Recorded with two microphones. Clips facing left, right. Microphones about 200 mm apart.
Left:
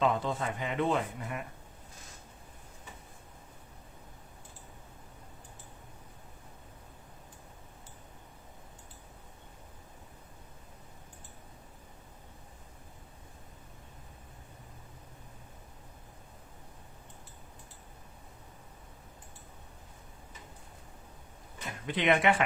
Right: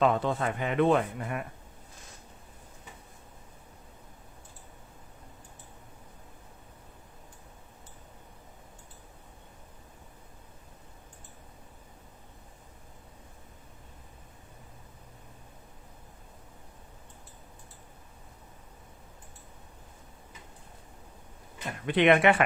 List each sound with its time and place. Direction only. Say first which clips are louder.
0.0 s speech: right 4 dB; 60° right (ahead or behind)
21.8 s speech: right 5 dB; 65° right (ahead or behind)